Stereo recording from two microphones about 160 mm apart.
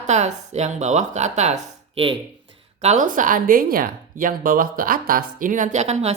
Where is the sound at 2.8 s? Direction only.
50° right (ahead or behind).